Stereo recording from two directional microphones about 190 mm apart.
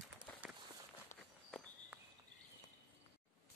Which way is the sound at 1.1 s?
40° left (ahead or behind).